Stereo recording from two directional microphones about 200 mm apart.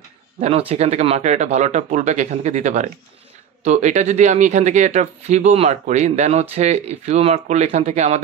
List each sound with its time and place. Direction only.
0.4 s speech: 30° right (ahead or behind)